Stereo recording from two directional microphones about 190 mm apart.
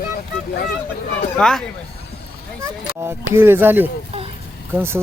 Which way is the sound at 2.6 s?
15° right (ahead or behind).